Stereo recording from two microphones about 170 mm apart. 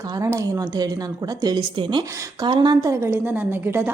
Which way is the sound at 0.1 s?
15° right (ahead or behind).